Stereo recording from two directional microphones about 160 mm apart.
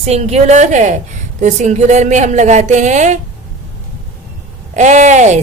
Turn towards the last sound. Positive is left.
turn(degrees=-45)  # may be behind; listen again after turning